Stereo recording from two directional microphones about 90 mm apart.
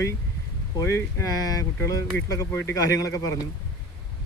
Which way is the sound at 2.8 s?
40° left (ahead or behind).